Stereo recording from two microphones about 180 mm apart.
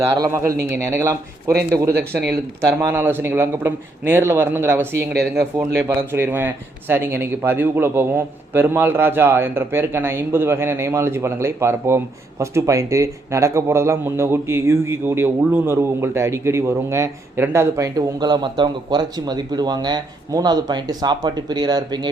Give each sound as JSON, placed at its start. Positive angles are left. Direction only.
{"t": 0.0, "sound": "a man's voice", "side_deg": -15}